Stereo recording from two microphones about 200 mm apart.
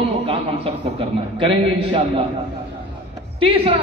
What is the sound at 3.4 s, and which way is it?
Speech, 25° right (ahead or behind).